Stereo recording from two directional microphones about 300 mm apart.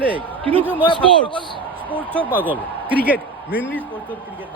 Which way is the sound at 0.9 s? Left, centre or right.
Centre.